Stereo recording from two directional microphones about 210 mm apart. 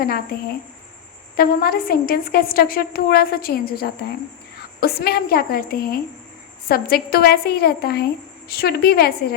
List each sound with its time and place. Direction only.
1.4 s a woman's voice: 45° left (ahead or behind)